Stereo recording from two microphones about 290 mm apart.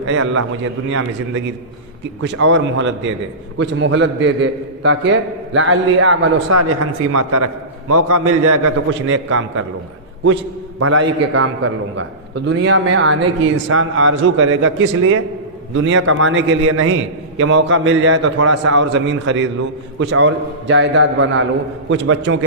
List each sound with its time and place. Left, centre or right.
0.1 s a man's voice: right
2.2 s a man's voice: right
10.8 s a man's voice: right
11.0 s a man's voice: right
18.8 s a man's voice: right